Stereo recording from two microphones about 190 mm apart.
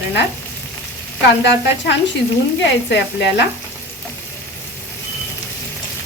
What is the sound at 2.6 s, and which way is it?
Speech, 65° left (ahead or behind).